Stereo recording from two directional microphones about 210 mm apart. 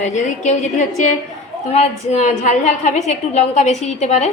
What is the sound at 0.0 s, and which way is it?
A woman's voice, 35° left (ahead or behind).